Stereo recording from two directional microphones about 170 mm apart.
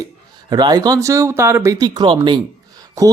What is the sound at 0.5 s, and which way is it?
Speech, 25° right (ahead or behind).